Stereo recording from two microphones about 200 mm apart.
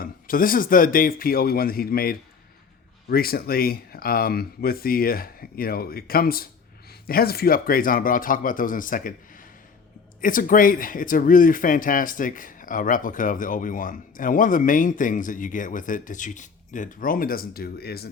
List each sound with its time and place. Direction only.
0.0 s speech: 45° left (ahead or behind)